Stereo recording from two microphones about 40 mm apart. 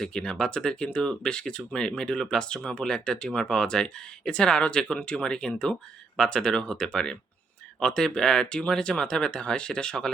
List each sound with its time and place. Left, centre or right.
0.0 s speech: centre